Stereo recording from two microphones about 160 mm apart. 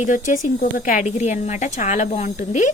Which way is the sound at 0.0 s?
55° left (ahead or behind).